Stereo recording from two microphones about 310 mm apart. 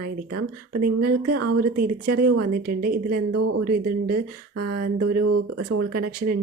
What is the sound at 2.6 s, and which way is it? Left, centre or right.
A woman's voice, right.